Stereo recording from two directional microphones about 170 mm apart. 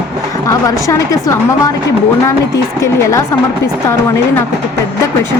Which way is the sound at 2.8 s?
20° left (ahead or behind).